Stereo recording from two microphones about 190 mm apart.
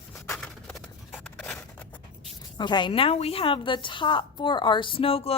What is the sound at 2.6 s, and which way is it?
A woman's voice, 25° left (ahead or behind).